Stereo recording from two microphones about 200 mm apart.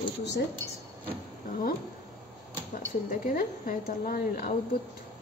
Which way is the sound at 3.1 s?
45° left (ahead or behind).